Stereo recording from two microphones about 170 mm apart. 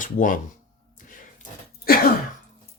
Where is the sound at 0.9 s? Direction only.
50° left (ahead or behind).